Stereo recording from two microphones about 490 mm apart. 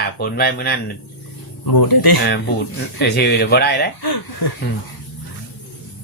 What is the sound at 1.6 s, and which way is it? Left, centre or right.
Speech, left.